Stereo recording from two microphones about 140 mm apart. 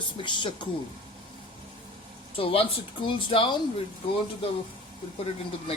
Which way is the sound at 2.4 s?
40° left (ahead or behind).